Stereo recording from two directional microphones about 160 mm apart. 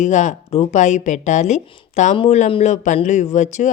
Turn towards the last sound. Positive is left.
turn(degrees=50)  # may be behind; listen again after turning